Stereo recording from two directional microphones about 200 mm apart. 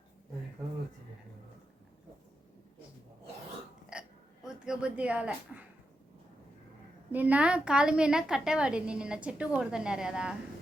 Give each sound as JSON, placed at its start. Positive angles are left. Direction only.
{"t": 3.9, "sound": "hiccup", "side_deg": -5}
{"t": 4.4, "sound": "a sound", "side_deg": -5}
{"t": 7.1, "sound": "a woman's voice", "side_deg": -10}